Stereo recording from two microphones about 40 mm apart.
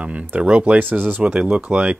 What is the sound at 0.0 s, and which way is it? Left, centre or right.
Speech, right.